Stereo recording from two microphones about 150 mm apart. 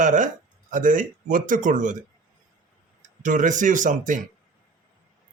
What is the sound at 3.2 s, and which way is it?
A man's voice, 60° right (ahead or behind).